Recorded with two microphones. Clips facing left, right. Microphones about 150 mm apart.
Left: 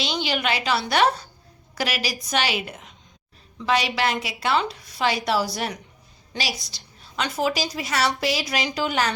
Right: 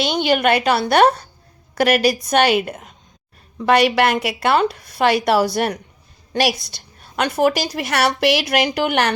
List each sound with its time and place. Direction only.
0.0 s a woman's voice: 55° right (ahead or behind)